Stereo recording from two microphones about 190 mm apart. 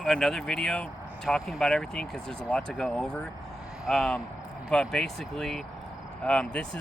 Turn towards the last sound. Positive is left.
turn(degrees=5)  # may be behind; listen again after turning